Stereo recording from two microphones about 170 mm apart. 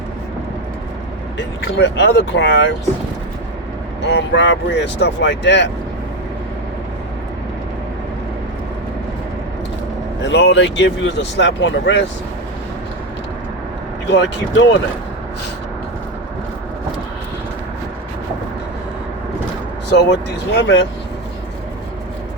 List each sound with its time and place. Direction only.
1.4 s speech: 90° left
4.0 s speech: 90° left
10.2 s speech: 90° left
14.1 s speech: 90° left
19.9 s speech: 90° left